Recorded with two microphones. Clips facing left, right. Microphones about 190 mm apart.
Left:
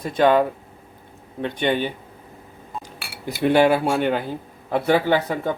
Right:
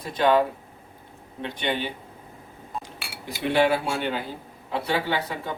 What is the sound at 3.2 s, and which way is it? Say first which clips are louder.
Speech: left 5 dB; 50° left (ahead or behind).